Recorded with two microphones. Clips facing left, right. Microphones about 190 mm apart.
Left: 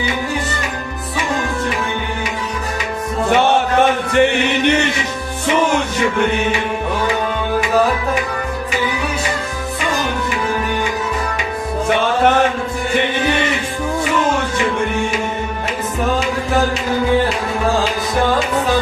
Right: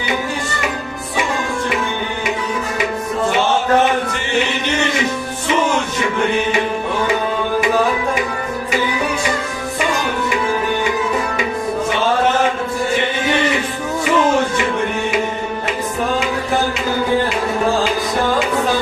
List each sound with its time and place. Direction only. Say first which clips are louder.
4.1 s chant: left 6 dB; 60° left (ahead or behind)